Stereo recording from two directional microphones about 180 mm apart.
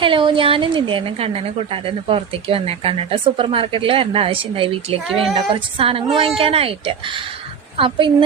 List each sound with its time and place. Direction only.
0.0 s a woman's voice: 30° right (ahead or behind)